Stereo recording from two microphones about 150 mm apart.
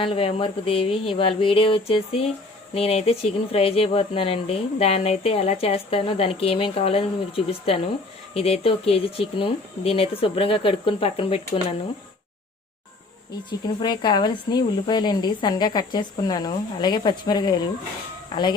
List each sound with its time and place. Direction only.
0.0 s speech: 40° left (ahead or behind)
13.7 s speech: 30° left (ahead or behind)